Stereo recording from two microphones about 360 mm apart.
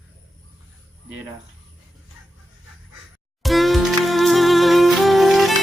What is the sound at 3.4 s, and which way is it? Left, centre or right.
Music, centre.